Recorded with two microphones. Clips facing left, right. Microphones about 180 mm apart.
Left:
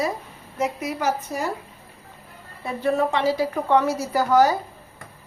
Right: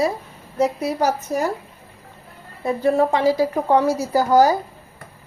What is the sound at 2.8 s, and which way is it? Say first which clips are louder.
A woman's voice: right 4 dB; 40° right (ahead or behind).